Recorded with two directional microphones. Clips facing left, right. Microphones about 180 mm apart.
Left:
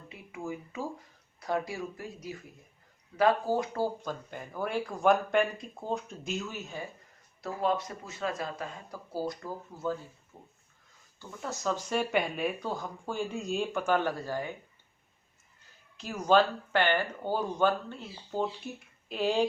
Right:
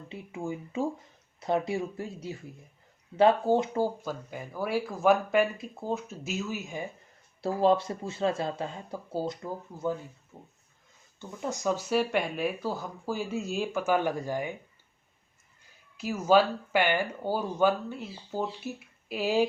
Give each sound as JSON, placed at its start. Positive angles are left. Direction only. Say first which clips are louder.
{"t": 0.1, "sound": "speech", "louder": "right 3 dB", "side_deg": -25}
{"t": 4.0, "sound": "speech", "louder": "right 2 dB", "side_deg": -5}
{"t": 7.4, "sound": "speech", "louder": "right 6 dB", "side_deg": -30}
{"t": 16.0, "sound": "speech", "louder": "right 2 dB", "side_deg": -5}